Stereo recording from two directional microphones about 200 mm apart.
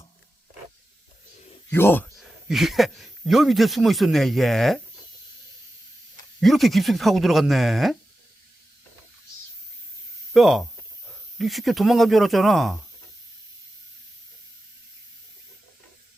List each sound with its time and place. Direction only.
1.4 s a sound: 30° left (ahead or behind)
1.7 s speech: 10° left (ahead or behind)
2.1 s speech: centre (ahead or behind)
6.4 s speech: centre (ahead or behind)
10.3 s speech: centre (ahead or behind)